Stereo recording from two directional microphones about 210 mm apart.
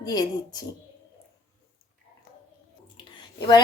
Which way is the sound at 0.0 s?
20° left (ahead or behind).